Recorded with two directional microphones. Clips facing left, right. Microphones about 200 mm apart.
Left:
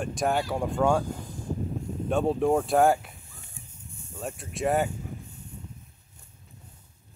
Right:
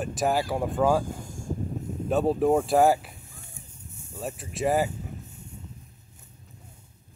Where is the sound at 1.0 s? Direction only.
50° right (ahead or behind).